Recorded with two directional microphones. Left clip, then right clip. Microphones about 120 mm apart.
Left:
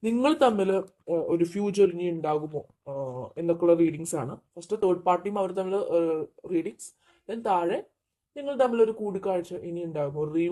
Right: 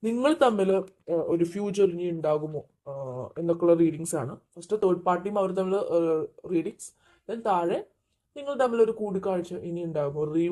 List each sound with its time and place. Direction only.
0.0 s a man's voice: centre (ahead or behind)
2.0 s speech: 10° left (ahead or behind)
3.1 s speech: 15° right (ahead or behind)